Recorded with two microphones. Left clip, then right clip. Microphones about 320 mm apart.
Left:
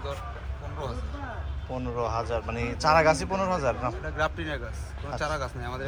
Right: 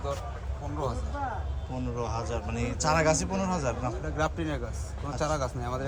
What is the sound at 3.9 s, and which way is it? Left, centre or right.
A man's voice, right.